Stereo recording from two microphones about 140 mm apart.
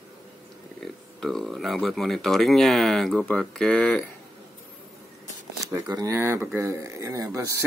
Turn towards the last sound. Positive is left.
turn(degrees=-25)  # may be behind; listen again after turning